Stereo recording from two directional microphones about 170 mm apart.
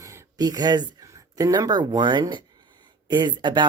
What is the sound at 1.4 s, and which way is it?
Speech, 20° right (ahead or behind).